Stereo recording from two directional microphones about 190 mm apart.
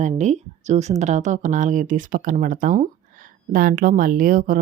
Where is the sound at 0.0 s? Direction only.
40° right (ahead or behind).